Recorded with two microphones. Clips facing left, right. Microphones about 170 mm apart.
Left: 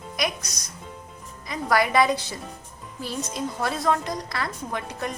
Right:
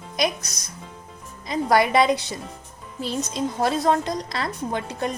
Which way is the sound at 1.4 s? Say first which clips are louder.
Right 3 dB; 25° right (ahead or behind).